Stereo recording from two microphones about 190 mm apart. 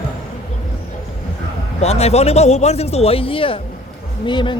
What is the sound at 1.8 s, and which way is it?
Speech, 35° left (ahead or behind).